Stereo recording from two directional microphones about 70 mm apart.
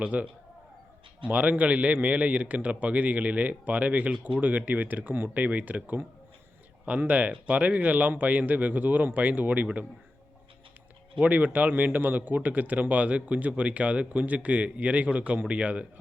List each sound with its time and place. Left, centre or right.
0.0 s a man's voice: right
11.2 s a man's voice: right